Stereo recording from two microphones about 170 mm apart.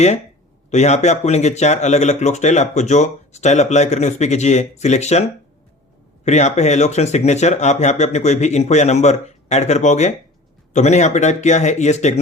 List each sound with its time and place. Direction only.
0.7 s speech: 40° left (ahead or behind)
6.2 s speech: 40° left (ahead or behind)